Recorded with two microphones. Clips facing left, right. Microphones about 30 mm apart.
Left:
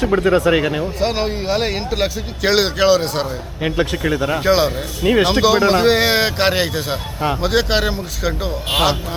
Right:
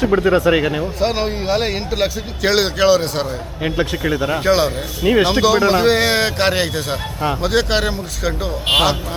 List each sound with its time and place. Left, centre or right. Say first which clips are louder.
0.0 s speech: right 1 dB; centre